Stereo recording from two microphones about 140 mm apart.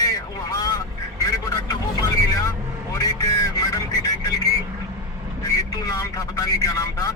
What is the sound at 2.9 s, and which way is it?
Music, 25° left (ahead or behind).